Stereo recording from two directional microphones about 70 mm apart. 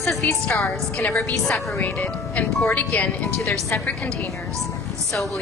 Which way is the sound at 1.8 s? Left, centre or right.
Left.